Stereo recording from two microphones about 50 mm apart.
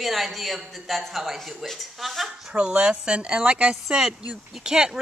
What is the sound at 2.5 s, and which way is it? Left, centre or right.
A woman's voice, centre.